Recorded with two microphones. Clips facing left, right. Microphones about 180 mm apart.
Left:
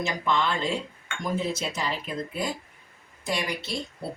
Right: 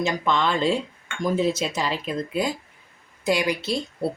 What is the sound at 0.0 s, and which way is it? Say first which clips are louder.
Speech: right 4 dB; 90° right.